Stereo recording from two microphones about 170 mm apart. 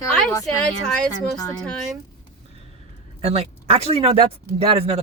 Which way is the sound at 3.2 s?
35° right (ahead or behind).